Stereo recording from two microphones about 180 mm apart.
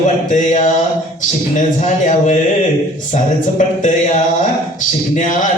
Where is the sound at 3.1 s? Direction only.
45° left (ahead or behind).